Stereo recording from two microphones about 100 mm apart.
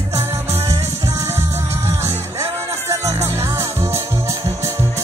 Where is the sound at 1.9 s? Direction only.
30° right (ahead or behind).